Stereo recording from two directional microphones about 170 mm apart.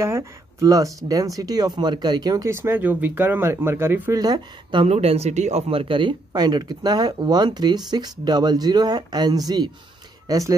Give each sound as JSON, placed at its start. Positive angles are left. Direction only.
{"t": 0.0, "sound": "speech", "side_deg": -15}
{"t": 4.2, "sound": "speech", "side_deg": -25}